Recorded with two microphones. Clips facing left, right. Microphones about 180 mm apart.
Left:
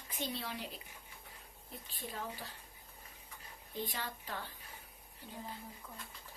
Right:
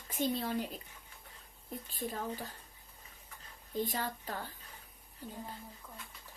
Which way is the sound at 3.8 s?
45° right (ahead or behind).